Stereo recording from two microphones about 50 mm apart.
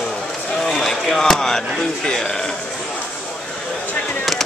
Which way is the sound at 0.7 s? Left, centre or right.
Centre.